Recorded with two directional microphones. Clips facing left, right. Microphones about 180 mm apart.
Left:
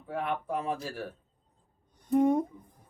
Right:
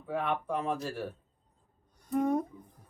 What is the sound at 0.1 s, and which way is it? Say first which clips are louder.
Speech: even; 5° left (ahead or behind).